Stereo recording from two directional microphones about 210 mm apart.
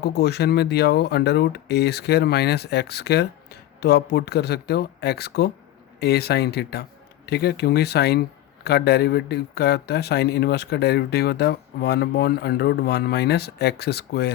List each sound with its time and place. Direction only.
0.0 s a man's voice: 50° left (ahead or behind)